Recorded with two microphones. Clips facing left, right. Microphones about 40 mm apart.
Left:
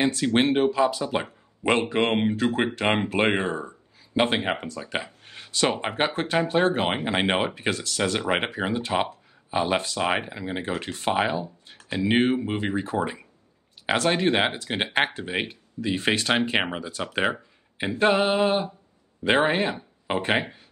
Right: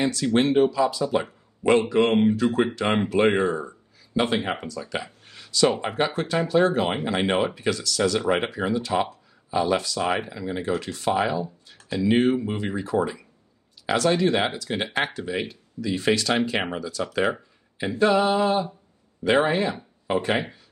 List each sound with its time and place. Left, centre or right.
0.0 s speech: left